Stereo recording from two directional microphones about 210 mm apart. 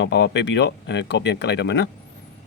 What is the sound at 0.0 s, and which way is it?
Speech, 55° left (ahead or behind).